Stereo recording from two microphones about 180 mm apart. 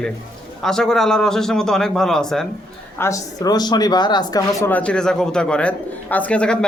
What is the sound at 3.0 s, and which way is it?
Speech, 20° left (ahead or behind).